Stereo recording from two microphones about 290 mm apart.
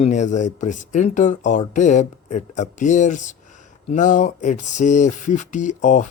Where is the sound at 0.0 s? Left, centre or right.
Left.